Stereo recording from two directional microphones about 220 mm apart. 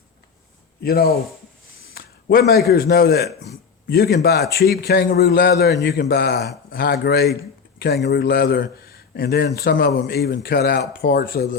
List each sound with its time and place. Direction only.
0.8 s speech: 45° left (ahead or behind)
1.9 s a sound: 45° left (ahead or behind)
2.6 s a man's voice: 45° left (ahead or behind)